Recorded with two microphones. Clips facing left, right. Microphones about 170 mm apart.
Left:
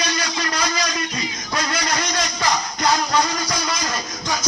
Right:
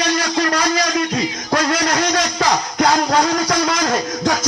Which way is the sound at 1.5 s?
60° right (ahead or behind).